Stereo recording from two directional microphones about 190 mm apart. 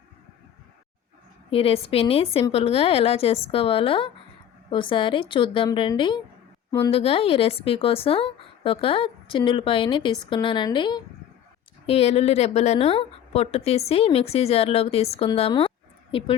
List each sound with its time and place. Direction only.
1.5 s a woman's voice: 30° left (ahead or behind)
6.9 s a woman's voice: 30° left (ahead or behind)